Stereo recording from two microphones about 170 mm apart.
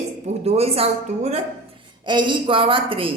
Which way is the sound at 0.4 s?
35° right (ahead or behind).